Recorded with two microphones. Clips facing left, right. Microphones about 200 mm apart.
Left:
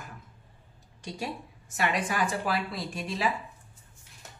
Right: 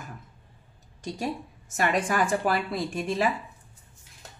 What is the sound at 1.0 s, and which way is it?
Speech, 45° right (ahead or behind).